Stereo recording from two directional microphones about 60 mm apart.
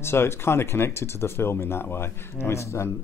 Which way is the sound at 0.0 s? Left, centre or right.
Left.